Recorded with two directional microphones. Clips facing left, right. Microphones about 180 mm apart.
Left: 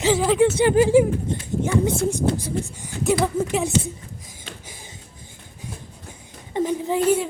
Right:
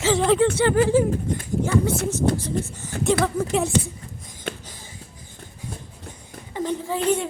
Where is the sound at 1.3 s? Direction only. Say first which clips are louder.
Even; 25° left (ahead or behind).